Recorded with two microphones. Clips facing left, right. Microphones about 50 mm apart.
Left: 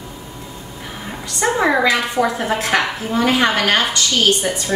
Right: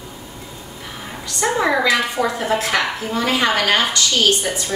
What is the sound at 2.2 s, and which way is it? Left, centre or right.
A woman's voice, centre.